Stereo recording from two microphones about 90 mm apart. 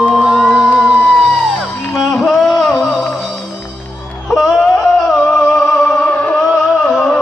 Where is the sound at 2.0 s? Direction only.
Centre (ahead or behind).